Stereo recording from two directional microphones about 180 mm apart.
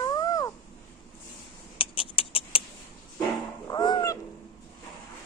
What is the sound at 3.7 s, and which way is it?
Cat, 25° left (ahead or behind).